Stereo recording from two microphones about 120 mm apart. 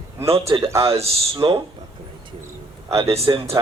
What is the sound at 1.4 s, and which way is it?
Speech, 40° right (ahead or behind).